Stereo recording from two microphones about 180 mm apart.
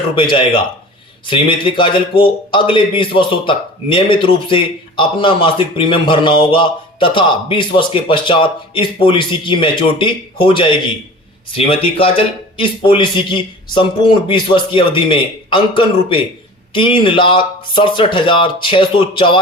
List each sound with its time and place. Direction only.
0.2 s a man's voice: 30° left (ahead or behind)